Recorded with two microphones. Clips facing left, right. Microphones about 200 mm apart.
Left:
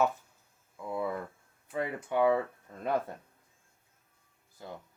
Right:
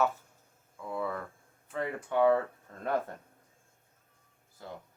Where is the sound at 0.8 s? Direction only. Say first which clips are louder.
Left 1 dB; 15° left (ahead or behind).